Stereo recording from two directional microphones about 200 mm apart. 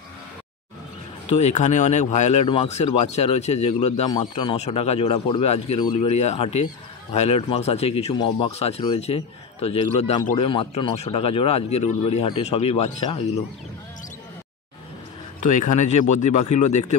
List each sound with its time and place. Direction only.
1.3 s speech: 35° left (ahead or behind)
15.4 s speech: 40° left (ahead or behind)